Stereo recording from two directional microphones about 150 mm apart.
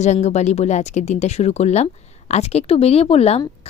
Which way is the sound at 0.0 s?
50° left (ahead or behind).